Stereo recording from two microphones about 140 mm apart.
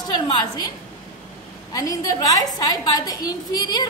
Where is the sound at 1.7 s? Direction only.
25° left (ahead or behind).